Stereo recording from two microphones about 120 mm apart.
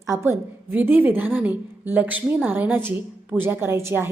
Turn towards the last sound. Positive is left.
turn(degrees=-20)  # may be behind; listen again after turning